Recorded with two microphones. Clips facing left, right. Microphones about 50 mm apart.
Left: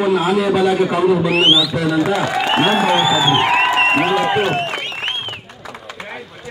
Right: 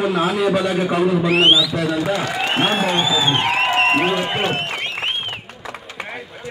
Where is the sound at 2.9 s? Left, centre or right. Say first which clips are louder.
Left 4 dB; left.